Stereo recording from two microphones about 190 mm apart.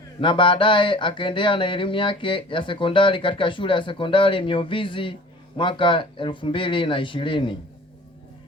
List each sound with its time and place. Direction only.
0.2 s speech: 25° left (ahead or behind)